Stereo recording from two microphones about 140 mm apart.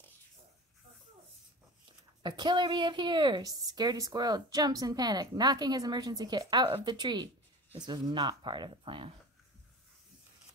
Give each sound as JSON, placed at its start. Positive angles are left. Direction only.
{"t": 2.2, "sound": "a woman's voice", "side_deg": -35}